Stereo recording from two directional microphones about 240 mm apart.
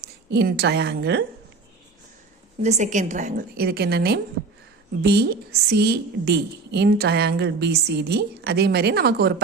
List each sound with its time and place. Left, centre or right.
0.0 s a woman's voice: right
2.6 s a woman's voice: right